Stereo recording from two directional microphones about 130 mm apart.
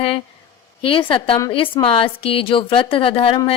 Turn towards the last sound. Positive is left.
turn(degrees=45)  # may be behind; listen again after turning